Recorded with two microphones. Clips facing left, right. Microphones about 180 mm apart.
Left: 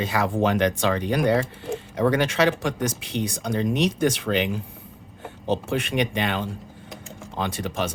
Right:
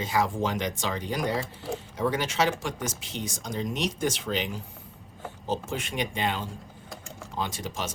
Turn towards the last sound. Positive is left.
turn(degrees=60)  # may be behind; listen again after turning